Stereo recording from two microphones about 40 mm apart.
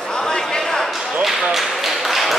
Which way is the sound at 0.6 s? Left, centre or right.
Centre.